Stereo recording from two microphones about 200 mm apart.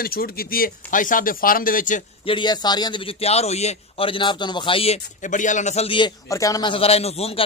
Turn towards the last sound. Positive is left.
turn(degrees=30)  # may be behind; listen again after turning